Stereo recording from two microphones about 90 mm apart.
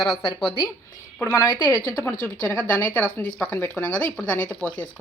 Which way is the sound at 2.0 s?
15° left (ahead or behind).